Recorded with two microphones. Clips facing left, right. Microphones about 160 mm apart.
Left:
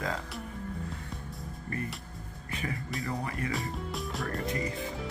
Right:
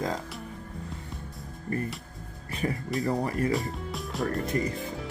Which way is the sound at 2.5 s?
35° right (ahead or behind).